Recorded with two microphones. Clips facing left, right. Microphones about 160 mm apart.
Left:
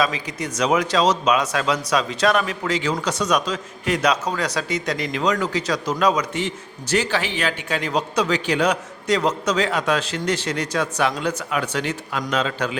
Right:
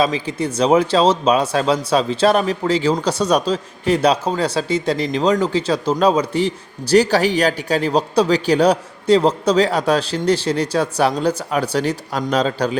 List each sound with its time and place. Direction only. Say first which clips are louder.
0.0 s speech: right 5 dB; 30° right (ahead or behind)